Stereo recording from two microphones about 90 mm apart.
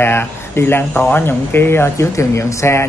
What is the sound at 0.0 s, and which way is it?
A man's voice, 25° left (ahead or behind).